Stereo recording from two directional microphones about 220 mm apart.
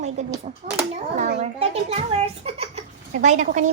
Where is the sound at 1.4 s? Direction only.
30° right (ahead or behind).